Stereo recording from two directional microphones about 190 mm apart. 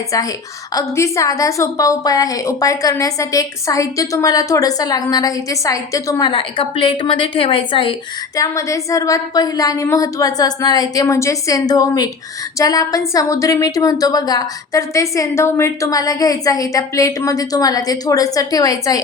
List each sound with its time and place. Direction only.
0.7 s a woman's voice: 15° left (ahead or behind)
8.4 s a woman's voice: 15° left (ahead or behind)